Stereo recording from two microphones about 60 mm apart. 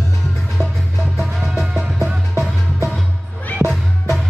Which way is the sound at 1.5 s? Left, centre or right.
Centre.